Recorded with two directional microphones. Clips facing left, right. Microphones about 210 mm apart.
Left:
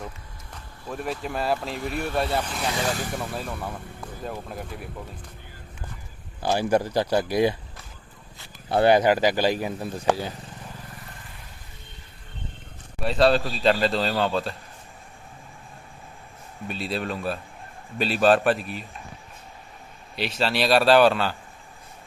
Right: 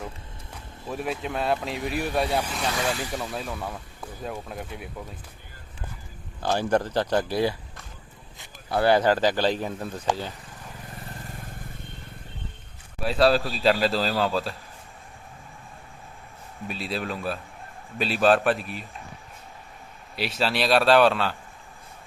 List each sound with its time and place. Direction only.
0.5 s a man's voice: 5° right (ahead or behind)
6.4 s speech: 10° left (ahead or behind)
8.7 s speech: 20° left (ahead or behind)
11.3 s vehicle: 50° right (ahead or behind)
13.0 s a man's voice: centre (ahead or behind)
16.6 s a man's voice: centre (ahead or behind)
20.1 s a man's voice: centre (ahead or behind)